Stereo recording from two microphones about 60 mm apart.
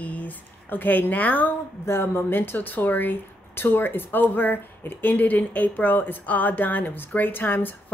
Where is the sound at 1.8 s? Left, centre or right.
Left.